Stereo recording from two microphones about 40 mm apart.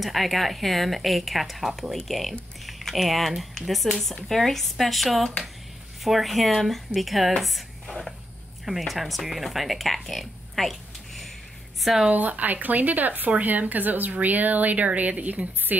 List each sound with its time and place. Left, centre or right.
0.0 s speech: centre
7.4 s a sound: centre
8.6 s speech: centre
12.1 s speech: right